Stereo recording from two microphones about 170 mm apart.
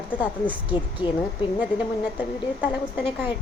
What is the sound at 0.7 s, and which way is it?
Speech, 30° left (ahead or behind).